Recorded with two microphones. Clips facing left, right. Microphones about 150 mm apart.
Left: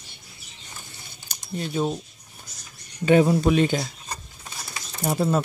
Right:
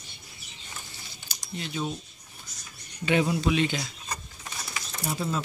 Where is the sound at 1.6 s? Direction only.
45° left (ahead or behind).